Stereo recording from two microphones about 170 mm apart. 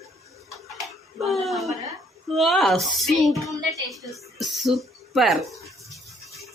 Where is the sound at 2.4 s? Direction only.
Centre (ahead or behind).